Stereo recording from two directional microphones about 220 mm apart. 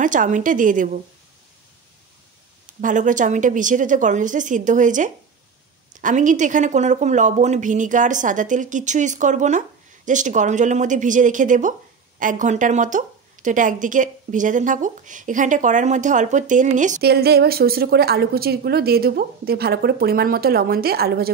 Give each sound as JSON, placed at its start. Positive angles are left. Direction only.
{"t": 0.0, "sound": "a woman's voice", "side_deg": -35}
{"t": 2.8, "sound": "a woman's voice", "side_deg": -35}